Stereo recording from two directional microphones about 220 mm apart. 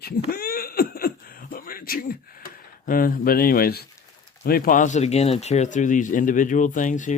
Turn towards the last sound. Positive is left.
turn(degrees=35)  # may be behind; listen again after turning